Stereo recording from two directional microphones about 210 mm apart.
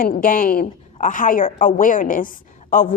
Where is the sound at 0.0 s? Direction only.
40° left (ahead or behind).